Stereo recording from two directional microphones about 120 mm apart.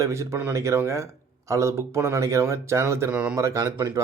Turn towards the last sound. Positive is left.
turn(degrees=-25)  # may be behind; listen again after turning